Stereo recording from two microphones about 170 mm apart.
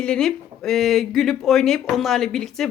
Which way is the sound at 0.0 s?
5° left (ahead or behind).